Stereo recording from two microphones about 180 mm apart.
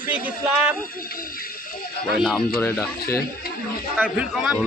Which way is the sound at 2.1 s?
Centre (ahead or behind).